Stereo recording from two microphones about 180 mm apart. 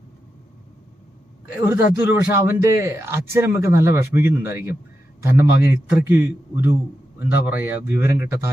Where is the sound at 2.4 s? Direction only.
15° right (ahead or behind).